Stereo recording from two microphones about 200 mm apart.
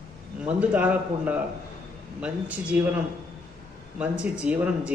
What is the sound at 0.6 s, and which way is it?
Speech, 5° right (ahead or behind).